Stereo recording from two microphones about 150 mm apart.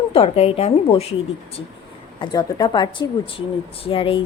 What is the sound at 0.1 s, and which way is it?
A woman's voice, 40° left (ahead or behind).